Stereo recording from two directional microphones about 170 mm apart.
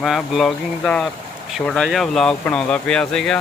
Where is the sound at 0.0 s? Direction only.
Centre (ahead or behind).